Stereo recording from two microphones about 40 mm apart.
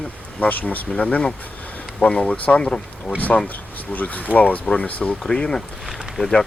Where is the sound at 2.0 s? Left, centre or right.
Left.